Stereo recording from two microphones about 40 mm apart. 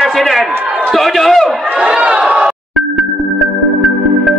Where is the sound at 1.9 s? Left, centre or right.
Right.